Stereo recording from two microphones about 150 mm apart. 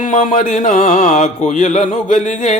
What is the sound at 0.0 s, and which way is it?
Speech, 55° left (ahead or behind).